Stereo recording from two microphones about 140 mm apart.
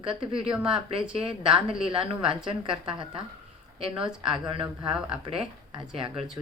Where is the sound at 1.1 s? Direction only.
40° right (ahead or behind).